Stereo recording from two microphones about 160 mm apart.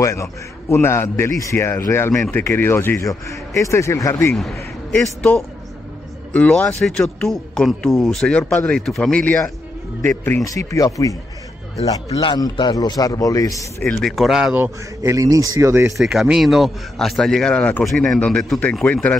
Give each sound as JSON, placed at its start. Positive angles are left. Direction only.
{"t": 0.0, "sound": "a man's voice", "side_deg": 20}
{"t": 4.3, "sound": "speech", "side_deg": 0}
{"t": 6.3, "sound": "speech", "side_deg": 10}
{"t": 13.8, "sound": "speech", "side_deg": 0}
{"t": 16.0, "sound": "speech", "side_deg": 0}